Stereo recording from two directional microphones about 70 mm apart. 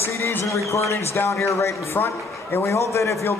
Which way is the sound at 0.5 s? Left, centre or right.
Left.